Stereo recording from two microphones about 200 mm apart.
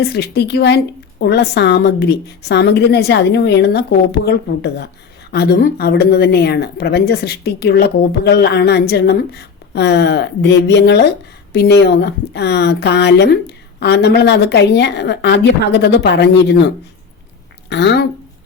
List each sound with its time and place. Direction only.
0.0 s speech: 55° left (ahead or behind)
17.7 s a woman's voice: 60° left (ahead or behind)